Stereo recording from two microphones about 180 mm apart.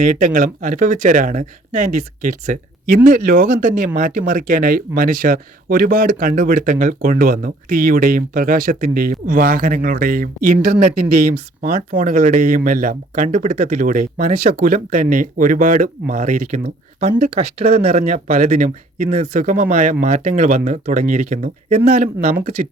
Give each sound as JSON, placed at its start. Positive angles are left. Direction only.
{"t": 0.0, "sound": "speech", "side_deg": -45}